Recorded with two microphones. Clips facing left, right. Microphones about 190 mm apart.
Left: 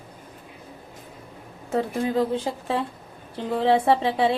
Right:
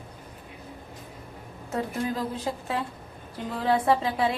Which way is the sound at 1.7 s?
30° left (ahead or behind).